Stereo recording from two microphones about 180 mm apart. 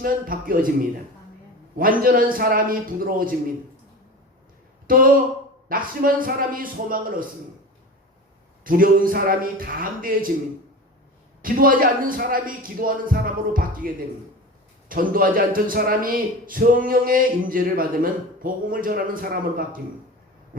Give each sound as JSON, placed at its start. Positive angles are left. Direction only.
{"t": 0.0, "sound": "a man's voice", "side_deg": -50}
{"t": 4.9, "sound": "a man's voice", "side_deg": -50}
{"t": 8.6, "sound": "a man's voice", "side_deg": -50}
{"t": 11.4, "sound": "a man's voice", "side_deg": -50}